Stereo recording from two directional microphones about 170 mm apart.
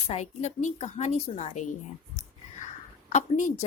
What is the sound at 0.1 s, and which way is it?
A woman's voice, 40° left (ahead or behind).